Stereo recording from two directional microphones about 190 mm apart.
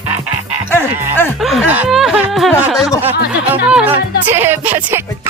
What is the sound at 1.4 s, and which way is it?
Chuckle, centre (ahead or behind).